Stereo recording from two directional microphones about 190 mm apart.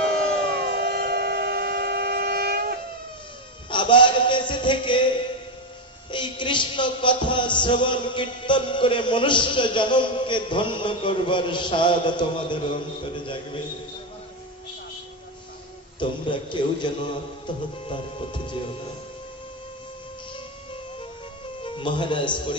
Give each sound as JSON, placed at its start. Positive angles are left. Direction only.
{"t": 0.7, "sound": "train", "side_deg": -60}
{"t": 3.7, "sound": "a sound", "side_deg": 25}
{"t": 6.1, "sound": "speech", "side_deg": 25}
{"t": 16.0, "sound": "speech", "side_deg": 25}
{"t": 21.6, "sound": "a man's voice", "side_deg": 25}